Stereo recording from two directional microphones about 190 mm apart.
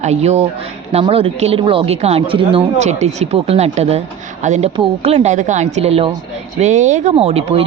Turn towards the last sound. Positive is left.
turn(degrees=-35)  # may be behind; listen again after turning